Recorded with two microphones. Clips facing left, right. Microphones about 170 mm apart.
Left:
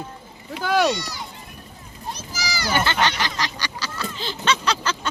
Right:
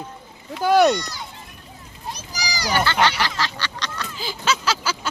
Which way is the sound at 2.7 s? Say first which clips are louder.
Right 2 dB; 20° left (ahead or behind).